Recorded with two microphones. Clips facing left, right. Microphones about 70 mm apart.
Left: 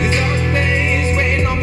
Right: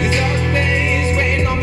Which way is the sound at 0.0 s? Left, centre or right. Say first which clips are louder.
Even; left.